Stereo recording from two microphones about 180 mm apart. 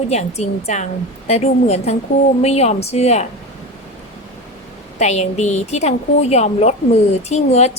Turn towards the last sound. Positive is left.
turn(degrees=35)  # may be behind; listen again after turning